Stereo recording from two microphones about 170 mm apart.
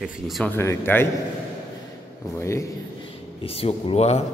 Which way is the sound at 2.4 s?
15° left (ahead or behind).